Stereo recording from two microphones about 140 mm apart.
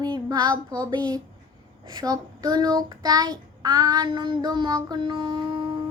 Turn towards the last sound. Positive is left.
turn(degrees=-35)  # may be behind; listen again after turning